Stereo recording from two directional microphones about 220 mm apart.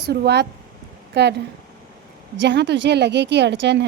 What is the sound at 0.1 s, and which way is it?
Speech, 50° right (ahead or behind).